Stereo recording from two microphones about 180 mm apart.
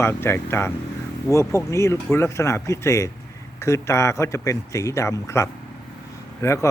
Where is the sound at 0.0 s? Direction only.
15° left (ahead or behind).